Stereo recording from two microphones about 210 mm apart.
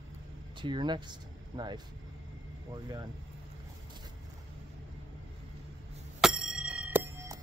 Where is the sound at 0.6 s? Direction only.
20° right (ahead or behind).